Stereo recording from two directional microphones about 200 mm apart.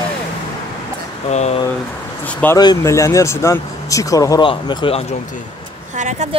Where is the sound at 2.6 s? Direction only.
20° left (ahead or behind).